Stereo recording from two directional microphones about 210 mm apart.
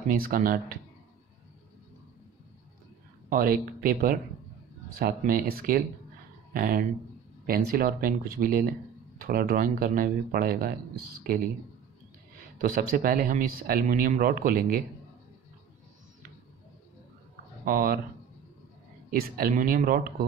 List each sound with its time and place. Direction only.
0.2 s speech: 40° right (ahead or behind)
3.3 s speech: 45° right (ahead or behind)
12.5 s speech: 40° right (ahead or behind)
17.6 s speech: 45° right (ahead or behind)
19.0 s speech: 45° right (ahead or behind)